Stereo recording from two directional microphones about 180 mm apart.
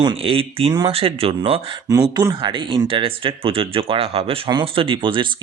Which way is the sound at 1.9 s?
20° right (ahead or behind).